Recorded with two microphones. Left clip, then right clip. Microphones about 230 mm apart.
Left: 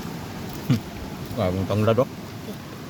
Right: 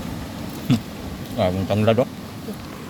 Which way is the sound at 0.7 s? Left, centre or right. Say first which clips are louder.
Right 4 dB; centre.